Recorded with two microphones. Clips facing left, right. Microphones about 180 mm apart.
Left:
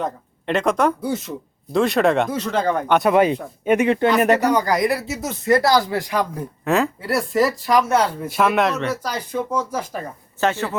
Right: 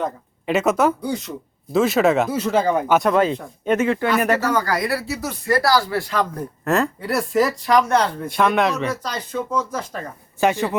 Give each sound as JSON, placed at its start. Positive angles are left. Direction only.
{"t": 0.0, "sound": "speech", "side_deg": -5}
{"t": 3.1, "sound": "speech", "side_deg": 15}
{"t": 3.8, "sound": "speech", "side_deg": 20}
{"t": 6.7, "sound": "speech", "side_deg": 0}
{"t": 10.4, "sound": "speech", "side_deg": -15}